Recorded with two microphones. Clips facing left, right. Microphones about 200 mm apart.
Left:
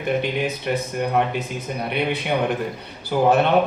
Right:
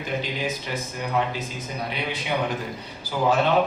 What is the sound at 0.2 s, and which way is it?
Speech, 60° left (ahead or behind).